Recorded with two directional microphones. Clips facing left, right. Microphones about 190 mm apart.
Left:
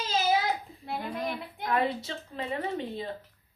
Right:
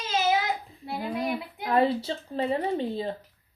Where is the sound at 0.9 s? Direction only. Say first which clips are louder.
Right 4 dB; 5° right (ahead or behind).